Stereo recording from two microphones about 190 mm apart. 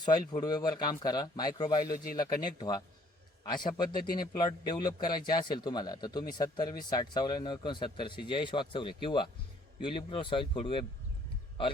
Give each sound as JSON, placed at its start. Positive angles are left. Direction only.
{"t": 0.0, "sound": "speech", "side_deg": 20}
{"t": 3.9, "sound": "a man's voice", "side_deg": 50}
{"t": 4.4, "sound": "speech", "side_deg": 20}